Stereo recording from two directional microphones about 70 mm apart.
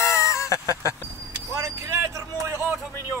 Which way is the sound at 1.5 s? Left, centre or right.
Right.